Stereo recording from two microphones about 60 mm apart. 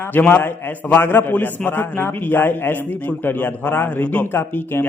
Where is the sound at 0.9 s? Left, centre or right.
Left.